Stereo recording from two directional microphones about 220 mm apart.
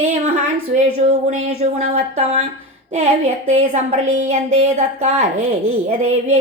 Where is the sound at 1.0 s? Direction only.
30° right (ahead or behind).